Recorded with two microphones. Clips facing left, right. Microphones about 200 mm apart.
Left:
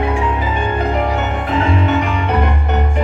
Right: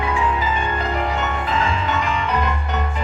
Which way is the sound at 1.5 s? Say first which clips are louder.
Left 8 dB; 60° left (ahead or behind).